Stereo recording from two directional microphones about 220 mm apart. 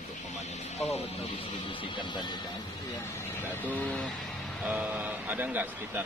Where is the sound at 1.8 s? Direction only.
20° left (ahead or behind).